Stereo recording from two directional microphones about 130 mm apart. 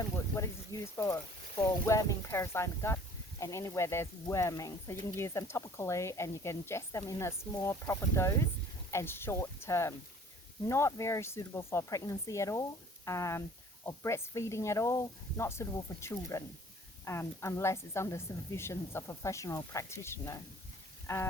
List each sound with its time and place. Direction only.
0.3 s speech: 25° left (ahead or behind)